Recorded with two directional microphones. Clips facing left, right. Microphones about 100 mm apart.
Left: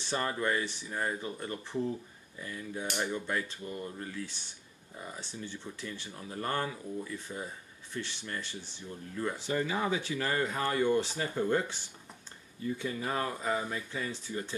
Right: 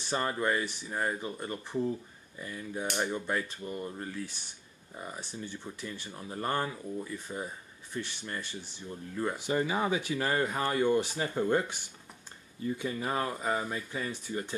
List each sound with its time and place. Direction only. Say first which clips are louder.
0.0 s speech: right 1 dB; 15° right (ahead or behind)
9.2 s speech: right 2 dB; 25° right (ahead or behind)